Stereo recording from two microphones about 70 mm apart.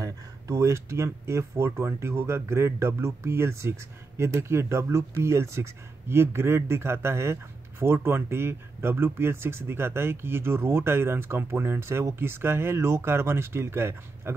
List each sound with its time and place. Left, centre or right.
0.0 s speech: right